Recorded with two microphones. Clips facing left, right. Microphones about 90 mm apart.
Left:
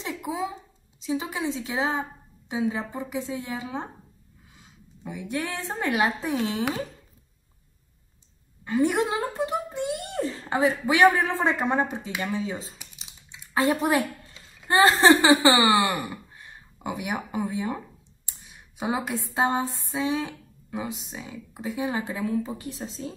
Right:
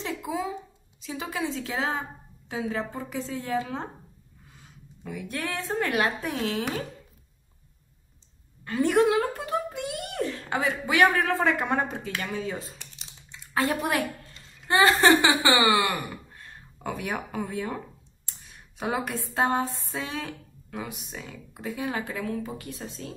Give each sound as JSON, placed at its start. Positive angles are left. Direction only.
{"t": 0.0, "sound": "a sound", "side_deg": 20}
{"t": 1.0, "sound": "a woman's voice", "side_deg": 20}
{"t": 8.6, "sound": "speech", "side_deg": 15}
{"t": 12.7, "sound": "typing", "side_deg": 5}
{"t": 13.3, "sound": "speech", "side_deg": 15}